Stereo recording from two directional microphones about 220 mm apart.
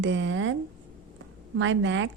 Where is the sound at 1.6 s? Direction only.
60° right (ahead or behind).